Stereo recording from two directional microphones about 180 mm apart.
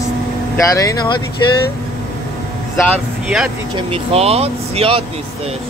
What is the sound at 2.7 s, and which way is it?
Speech, 10° left (ahead or behind).